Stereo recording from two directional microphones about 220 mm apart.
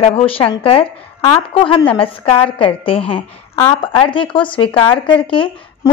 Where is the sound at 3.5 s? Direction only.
15° left (ahead or behind).